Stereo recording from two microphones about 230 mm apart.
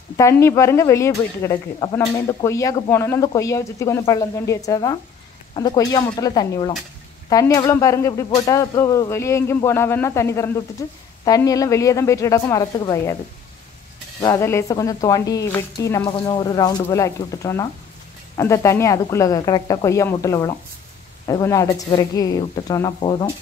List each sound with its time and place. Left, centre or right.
0.2 s speech: centre
14.2 s speech: centre